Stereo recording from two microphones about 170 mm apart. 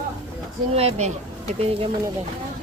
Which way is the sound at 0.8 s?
40° right (ahead or behind).